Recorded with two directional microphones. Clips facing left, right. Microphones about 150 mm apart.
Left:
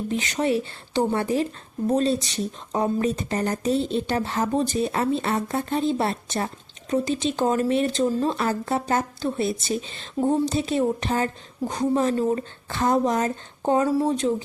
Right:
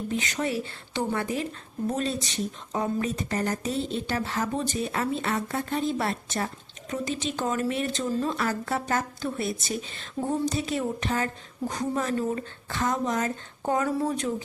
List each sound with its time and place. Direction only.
0.1 s speech: 30° left (ahead or behind)